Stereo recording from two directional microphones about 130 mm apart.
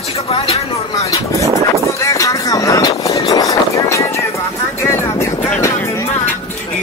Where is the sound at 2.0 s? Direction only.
25° left (ahead or behind).